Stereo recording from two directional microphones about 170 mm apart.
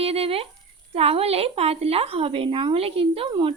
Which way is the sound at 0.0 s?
35° right (ahead or behind).